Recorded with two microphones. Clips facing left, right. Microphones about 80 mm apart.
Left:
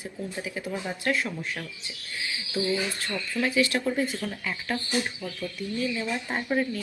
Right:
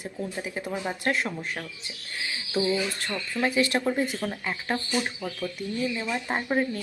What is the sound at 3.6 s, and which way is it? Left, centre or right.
Speech, right.